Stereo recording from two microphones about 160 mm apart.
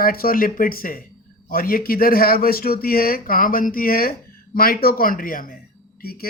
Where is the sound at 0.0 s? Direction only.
65° left (ahead or behind).